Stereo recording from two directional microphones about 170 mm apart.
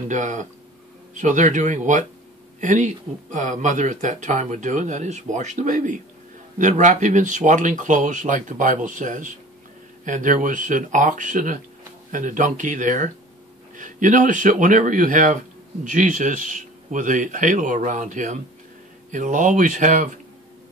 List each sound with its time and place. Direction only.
0.1 s speech: 45° right (ahead or behind)